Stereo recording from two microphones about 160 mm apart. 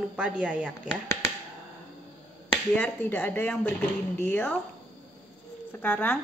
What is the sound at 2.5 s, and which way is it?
A woman's voice, 10° left (ahead or behind).